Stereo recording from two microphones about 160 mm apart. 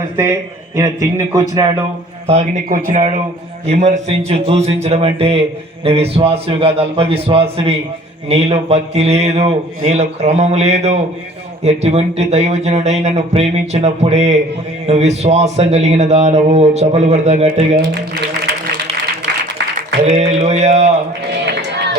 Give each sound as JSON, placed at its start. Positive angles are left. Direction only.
{"t": 0.8, "sound": "a man's voice", "side_deg": -20}
{"t": 2.2, "sound": "a man's voice", "side_deg": -45}
{"t": 20.1, "sound": "speech", "side_deg": -40}